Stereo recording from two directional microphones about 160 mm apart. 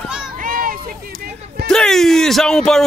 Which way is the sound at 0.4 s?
60° right (ahead or behind).